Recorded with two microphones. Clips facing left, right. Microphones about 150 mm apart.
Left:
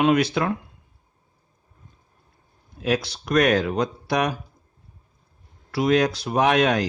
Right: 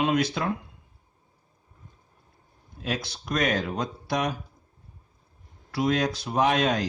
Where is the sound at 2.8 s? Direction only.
75° left (ahead or behind).